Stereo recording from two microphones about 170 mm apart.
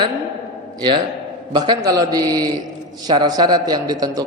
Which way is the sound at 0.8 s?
30° right (ahead or behind).